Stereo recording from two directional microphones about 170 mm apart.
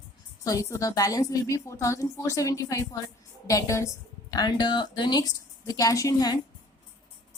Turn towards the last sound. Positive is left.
turn(degrees=20)  # may be behind; listen again after turning